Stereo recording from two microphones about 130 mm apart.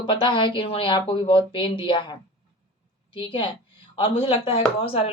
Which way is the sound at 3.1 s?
40° left (ahead or behind).